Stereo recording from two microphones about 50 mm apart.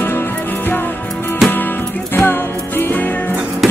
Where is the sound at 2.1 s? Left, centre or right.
Left.